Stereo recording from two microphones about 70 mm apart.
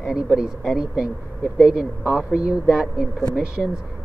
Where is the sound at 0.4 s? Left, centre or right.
Centre.